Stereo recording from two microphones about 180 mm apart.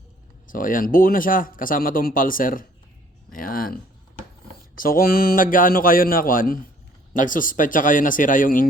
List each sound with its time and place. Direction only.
0.5 s speech: 50° left (ahead or behind)